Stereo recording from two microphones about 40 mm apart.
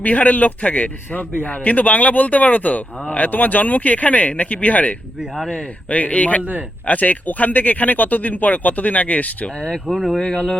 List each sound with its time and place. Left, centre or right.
0.0 s a man's voice: left
9.8 s speech: centre